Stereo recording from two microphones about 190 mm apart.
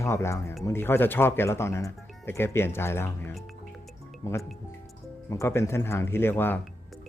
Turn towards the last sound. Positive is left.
turn(degrees=10)  # may be behind; listen again after turning